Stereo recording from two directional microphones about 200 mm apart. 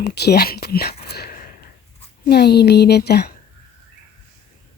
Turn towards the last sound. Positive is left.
turn(degrees=55)  # may be behind; listen again after turning